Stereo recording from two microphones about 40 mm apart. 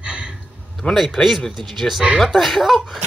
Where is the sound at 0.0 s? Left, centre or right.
Right.